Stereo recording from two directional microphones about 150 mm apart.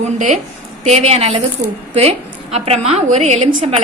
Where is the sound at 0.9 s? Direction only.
45° right (ahead or behind).